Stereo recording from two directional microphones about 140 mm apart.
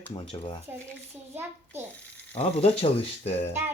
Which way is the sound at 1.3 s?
15° right (ahead or behind).